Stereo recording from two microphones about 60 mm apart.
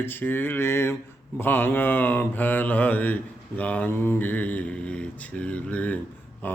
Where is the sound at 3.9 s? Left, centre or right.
Left.